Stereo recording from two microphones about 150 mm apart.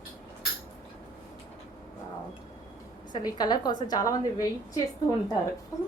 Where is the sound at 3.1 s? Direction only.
30° left (ahead or behind).